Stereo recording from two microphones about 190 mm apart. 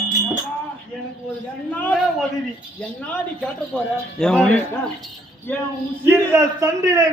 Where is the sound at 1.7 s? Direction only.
10° left (ahead or behind).